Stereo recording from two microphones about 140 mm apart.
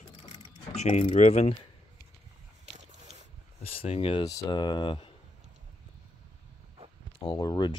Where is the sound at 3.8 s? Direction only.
40° left (ahead or behind).